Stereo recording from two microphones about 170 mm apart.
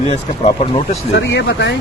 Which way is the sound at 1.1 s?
90° left.